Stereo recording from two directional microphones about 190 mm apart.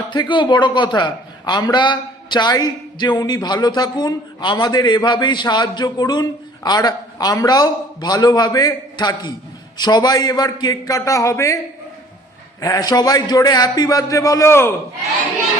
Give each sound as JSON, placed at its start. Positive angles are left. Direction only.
{"t": 0.1, "sound": "a man's voice", "side_deg": 25}